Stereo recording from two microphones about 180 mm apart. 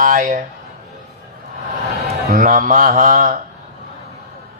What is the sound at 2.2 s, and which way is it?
Mantra, 50° right (ahead or behind).